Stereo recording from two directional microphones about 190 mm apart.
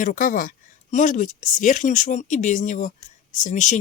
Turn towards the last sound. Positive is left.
turn(degrees=40)  # may be behind; listen again after turning